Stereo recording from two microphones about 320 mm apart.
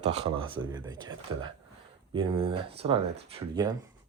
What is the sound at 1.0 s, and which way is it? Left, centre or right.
Speech, centre.